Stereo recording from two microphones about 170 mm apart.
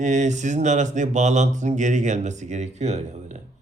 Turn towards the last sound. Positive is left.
turn(degrees=-40)  # may be behind; listen again after turning